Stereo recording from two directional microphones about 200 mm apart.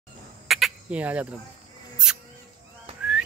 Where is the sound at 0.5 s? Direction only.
Centre (ahead or behind).